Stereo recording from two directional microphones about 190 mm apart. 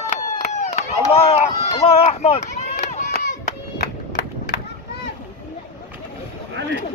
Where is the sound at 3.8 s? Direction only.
60° left (ahead or behind).